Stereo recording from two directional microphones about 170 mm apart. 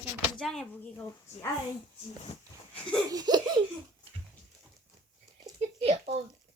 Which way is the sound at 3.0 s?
20° right (ahead or behind).